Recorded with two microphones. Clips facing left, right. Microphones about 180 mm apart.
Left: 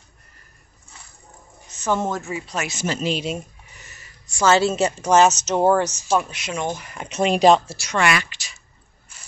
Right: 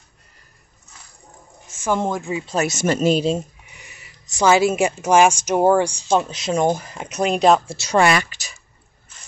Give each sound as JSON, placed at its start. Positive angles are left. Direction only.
{"t": 1.7, "sound": "speech", "side_deg": -10}
{"t": 2.9, "sound": "speech", "side_deg": -45}
{"t": 3.7, "sound": "a woman's voice", "side_deg": -15}
{"t": 6.0, "sound": "speech", "side_deg": -30}
{"t": 6.6, "sound": "speech", "side_deg": -45}
{"t": 7.1, "sound": "speech", "side_deg": 0}
{"t": 7.7, "sound": "speech", "side_deg": -30}